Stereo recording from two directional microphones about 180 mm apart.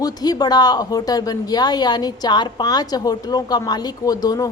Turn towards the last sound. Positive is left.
turn(degrees=20)  # may be behind; listen again after turning